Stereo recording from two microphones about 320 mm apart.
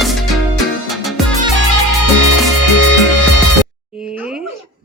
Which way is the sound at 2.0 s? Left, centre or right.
Left.